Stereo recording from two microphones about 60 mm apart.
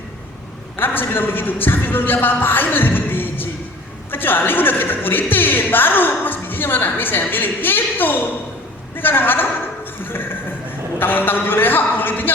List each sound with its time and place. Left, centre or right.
0.8 s a man's voice: left
10.0 s music: left
11.0 s a woman's voice: left